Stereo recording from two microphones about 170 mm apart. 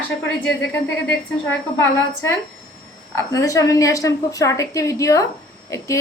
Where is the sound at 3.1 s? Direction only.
20° left (ahead or behind).